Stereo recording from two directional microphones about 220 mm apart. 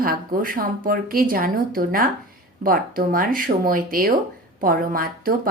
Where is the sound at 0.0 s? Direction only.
40° right (ahead or behind).